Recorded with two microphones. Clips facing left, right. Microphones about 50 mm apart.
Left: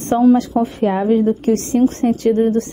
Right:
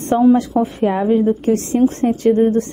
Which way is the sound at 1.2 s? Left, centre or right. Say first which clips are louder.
Even; right.